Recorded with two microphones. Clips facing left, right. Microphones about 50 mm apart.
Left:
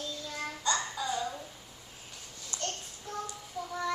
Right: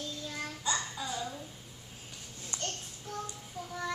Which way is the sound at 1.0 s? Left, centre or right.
Centre.